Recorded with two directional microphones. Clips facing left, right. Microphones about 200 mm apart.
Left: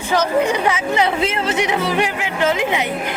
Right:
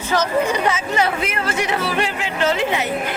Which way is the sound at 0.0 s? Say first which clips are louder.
Left 2 dB; 15° left (ahead or behind).